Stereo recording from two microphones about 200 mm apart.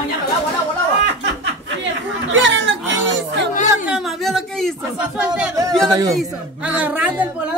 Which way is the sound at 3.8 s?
Centre (ahead or behind).